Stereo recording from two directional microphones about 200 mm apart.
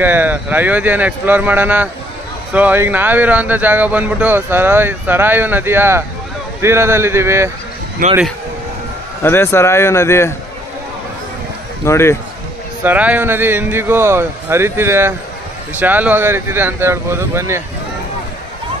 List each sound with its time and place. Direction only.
0.0 s speech: 10° right (ahead or behind)
8.0 s speech: 40° right (ahead or behind)
9.2 s speech: 10° left (ahead or behind)
11.8 s speech: 15° left (ahead or behind)
12.8 s speech: 10° right (ahead or behind)